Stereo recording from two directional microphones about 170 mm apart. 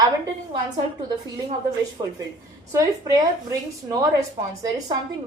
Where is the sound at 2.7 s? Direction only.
20° right (ahead or behind).